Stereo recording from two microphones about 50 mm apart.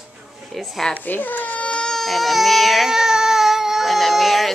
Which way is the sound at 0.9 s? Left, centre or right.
Left.